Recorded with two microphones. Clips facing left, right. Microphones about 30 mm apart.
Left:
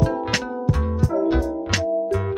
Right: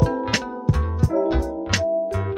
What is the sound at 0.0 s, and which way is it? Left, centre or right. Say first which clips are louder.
Music: even; centre.